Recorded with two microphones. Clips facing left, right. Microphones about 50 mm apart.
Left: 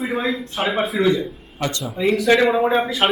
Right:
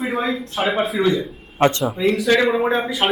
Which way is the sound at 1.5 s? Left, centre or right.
Right.